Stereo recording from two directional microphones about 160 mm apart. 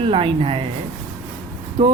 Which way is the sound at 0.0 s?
35° right (ahead or behind).